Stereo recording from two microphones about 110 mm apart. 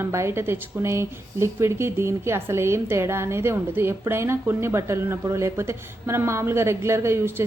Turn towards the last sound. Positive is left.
turn(degrees=-20)  # may be behind; listen again after turning